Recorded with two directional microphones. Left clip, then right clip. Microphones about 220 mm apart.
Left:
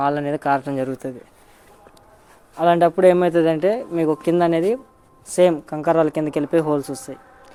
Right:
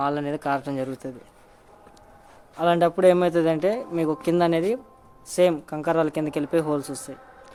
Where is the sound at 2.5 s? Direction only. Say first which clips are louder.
Left 5 dB; 10° left (ahead or behind).